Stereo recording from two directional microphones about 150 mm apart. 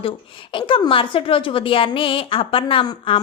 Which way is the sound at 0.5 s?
35° left (ahead or behind).